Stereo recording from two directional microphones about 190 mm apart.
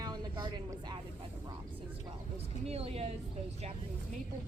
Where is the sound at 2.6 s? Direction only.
35° right (ahead or behind).